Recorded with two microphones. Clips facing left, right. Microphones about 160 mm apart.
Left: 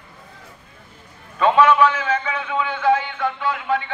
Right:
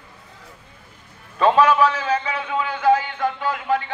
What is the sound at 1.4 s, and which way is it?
Speech, 35° right (ahead or behind).